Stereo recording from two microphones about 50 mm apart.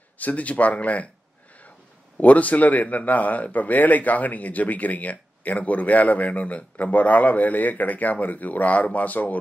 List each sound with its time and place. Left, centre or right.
0.2 s speech: left
2.1 s a man's voice: left